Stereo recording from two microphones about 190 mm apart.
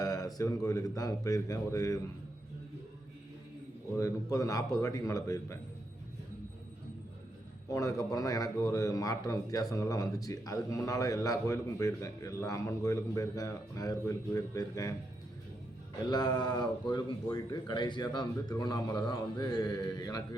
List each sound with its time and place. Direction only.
0.0 s a sound: 20° left (ahead or behind)
0.3 s a man's voice: 15° left (ahead or behind)
3.9 s a man's voice: 15° left (ahead or behind)
7.7 s a man's voice: 15° left (ahead or behind)
16.0 s speech: 20° left (ahead or behind)